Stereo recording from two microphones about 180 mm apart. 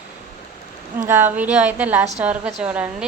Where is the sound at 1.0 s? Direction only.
10° right (ahead or behind).